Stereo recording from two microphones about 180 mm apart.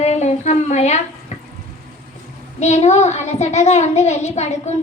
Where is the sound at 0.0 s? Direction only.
40° left (ahead or behind).